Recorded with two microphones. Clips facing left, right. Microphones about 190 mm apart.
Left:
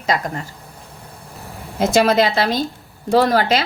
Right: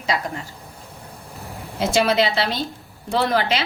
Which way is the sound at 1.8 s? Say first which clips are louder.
Left 4 dB; 40° left (ahead or behind).